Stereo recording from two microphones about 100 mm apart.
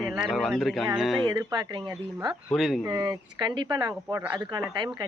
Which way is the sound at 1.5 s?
50° right (ahead or behind).